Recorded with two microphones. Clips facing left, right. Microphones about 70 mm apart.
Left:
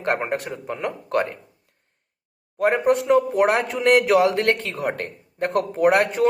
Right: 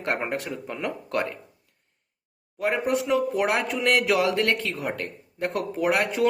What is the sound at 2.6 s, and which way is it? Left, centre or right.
Speech, left.